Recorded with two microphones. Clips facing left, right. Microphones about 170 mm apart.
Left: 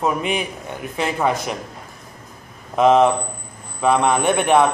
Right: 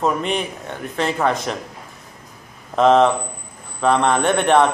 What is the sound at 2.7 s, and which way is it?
A man's voice, 10° left (ahead or behind).